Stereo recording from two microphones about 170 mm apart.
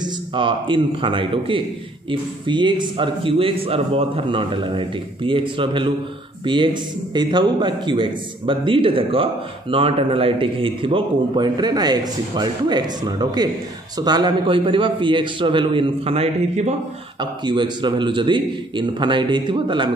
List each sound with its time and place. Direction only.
0.0 s a man's voice: 30° right (ahead or behind)
17.2 s a man's voice: 30° right (ahead or behind)